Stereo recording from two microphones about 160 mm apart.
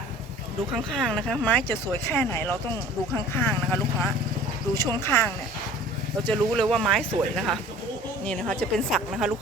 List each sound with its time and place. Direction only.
0.9 s speech: 5° left (ahead or behind)